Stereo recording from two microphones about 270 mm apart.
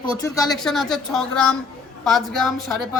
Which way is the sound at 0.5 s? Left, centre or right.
Centre.